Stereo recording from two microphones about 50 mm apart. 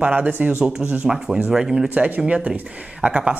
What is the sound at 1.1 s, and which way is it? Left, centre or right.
Speech, centre.